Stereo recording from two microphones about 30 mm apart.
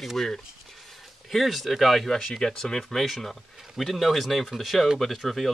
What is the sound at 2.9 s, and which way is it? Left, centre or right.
Speech, centre.